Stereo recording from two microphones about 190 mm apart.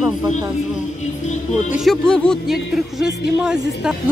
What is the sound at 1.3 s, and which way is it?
Speech, 40° left (ahead or behind).